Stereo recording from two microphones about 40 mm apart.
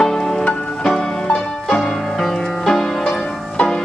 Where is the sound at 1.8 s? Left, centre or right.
Centre.